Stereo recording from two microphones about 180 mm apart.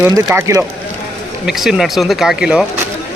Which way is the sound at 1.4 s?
Centre (ahead or behind).